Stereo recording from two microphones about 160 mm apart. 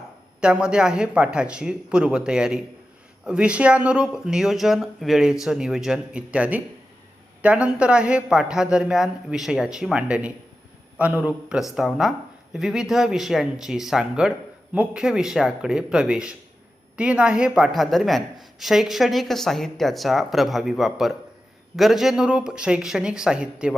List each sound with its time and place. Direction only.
0.4 s a woman's voice: 5° right (ahead or behind)